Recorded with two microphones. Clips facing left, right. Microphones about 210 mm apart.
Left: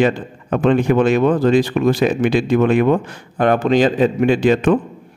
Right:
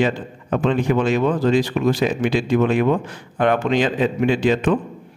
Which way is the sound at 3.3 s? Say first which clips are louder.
Left 3 dB; 40° left (ahead or behind).